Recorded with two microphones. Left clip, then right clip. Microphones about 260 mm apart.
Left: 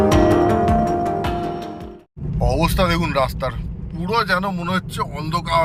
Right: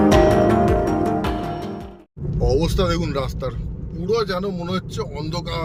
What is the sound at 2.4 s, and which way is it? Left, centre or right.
Speech, centre.